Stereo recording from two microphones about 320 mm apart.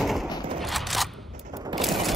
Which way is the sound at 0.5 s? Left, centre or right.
Centre.